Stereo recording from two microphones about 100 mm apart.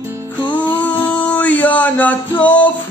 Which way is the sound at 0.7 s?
15° left (ahead or behind).